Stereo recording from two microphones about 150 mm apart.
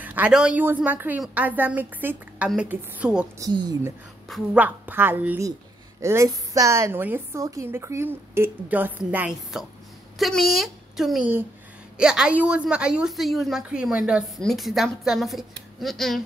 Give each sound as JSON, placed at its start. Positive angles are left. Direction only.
{"t": 0.0, "sound": "a woman's voice", "side_deg": -10}
{"t": 3.3, "sound": "a woman's voice", "side_deg": -25}
{"t": 4.6, "sound": "a woman's voice", "side_deg": -10}